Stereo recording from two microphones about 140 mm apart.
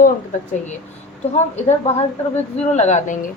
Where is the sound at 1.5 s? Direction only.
50° left (ahead or behind).